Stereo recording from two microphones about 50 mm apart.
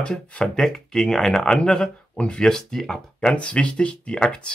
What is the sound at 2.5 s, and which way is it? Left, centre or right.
Speech, centre.